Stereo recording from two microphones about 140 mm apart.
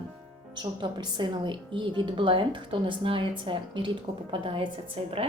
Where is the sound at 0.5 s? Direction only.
30° right (ahead or behind).